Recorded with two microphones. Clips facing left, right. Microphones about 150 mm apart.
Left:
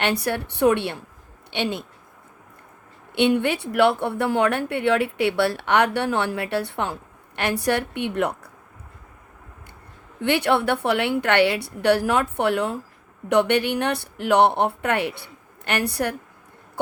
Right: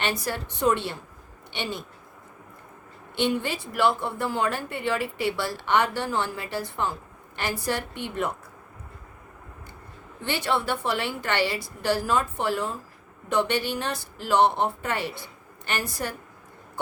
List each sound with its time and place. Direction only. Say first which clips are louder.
0.0 s a woman's voice: left 5 dB; 65° left (ahead or behind)
3.2 s a woman's voice: left 6 dB; 65° left (ahead or behind)
10.2 s a woman's voice: left 6 dB; 65° left (ahead or behind)
16.8 s throat clearing: left 7 dB; 65° left (ahead or behind)